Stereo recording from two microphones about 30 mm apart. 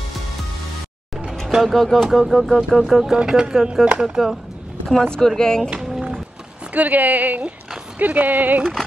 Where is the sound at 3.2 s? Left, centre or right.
Right.